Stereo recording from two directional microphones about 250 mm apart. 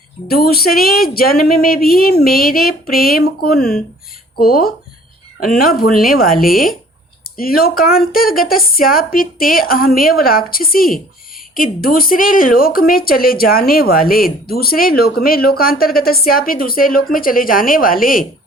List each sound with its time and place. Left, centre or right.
0.3 s speech: left